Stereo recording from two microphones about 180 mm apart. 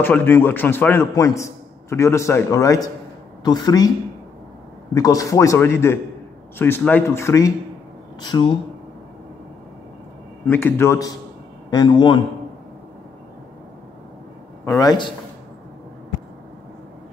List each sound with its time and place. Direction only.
0.0 s a man's voice: 10° left (ahead or behind)
4.9 s a man's voice: 20° left (ahead or behind)
10.4 s a man's voice: 10° left (ahead or behind)
14.6 s a man's voice: 20° left (ahead or behind)